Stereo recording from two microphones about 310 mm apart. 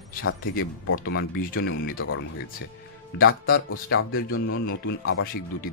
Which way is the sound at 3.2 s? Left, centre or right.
Left.